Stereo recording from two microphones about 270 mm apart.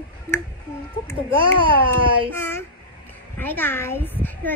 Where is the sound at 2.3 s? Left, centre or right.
Centre.